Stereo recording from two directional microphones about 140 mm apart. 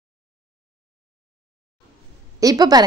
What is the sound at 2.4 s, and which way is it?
Speech, 25° right (ahead or behind).